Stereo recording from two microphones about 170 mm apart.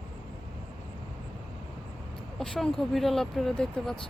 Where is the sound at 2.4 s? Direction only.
5° left (ahead or behind).